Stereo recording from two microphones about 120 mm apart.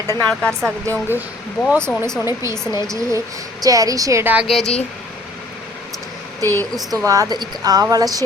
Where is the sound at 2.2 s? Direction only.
25° right (ahead or behind).